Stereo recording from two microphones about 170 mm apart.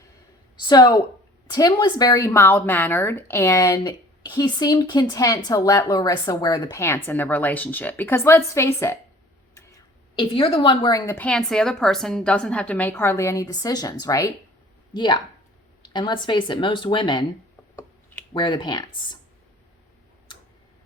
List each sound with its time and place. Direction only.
0.5 s a woman's voice: 25° left (ahead or behind)
10.2 s a woman's voice: 35° left (ahead or behind)
17.7 s a sound: 15° left (ahead or behind)
18.3 s speech: 25° left (ahead or behind)